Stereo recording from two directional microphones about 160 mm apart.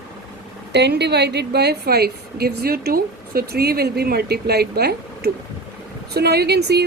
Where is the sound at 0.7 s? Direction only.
90° right.